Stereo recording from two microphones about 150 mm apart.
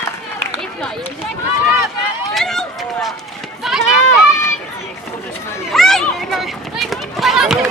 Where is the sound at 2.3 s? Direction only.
Centre (ahead or behind).